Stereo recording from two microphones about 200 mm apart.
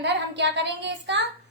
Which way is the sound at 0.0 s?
60° right (ahead or behind).